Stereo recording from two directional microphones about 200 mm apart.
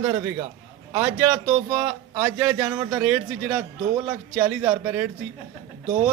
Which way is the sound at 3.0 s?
5° right (ahead or behind).